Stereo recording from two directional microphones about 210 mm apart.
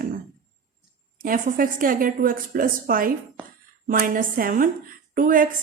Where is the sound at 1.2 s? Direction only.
40° right (ahead or behind).